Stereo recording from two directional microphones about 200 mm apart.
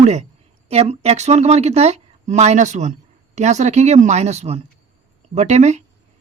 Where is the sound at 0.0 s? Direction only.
35° right (ahead or behind).